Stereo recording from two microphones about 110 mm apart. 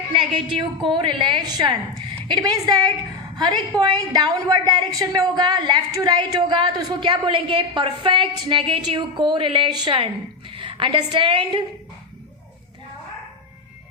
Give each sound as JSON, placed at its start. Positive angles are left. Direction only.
{"t": 0.1, "sound": "a woman's voice", "side_deg": -50}